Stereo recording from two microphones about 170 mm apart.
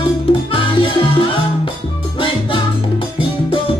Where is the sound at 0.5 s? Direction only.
30° left (ahead or behind).